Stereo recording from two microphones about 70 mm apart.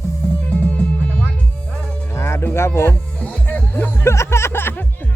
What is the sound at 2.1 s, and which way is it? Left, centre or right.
Music, left.